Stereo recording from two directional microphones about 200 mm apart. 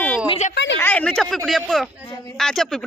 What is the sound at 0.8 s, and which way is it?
A woman's voice, 10° left (ahead or behind).